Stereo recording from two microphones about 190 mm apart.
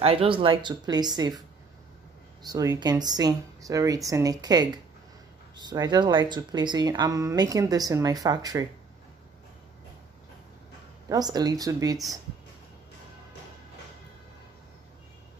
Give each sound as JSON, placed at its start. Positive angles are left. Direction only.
{"t": 0.0, "sound": "speech", "side_deg": -30}
{"t": 2.4, "sound": "speech", "side_deg": -20}
{"t": 11.1, "sound": "speech", "side_deg": -20}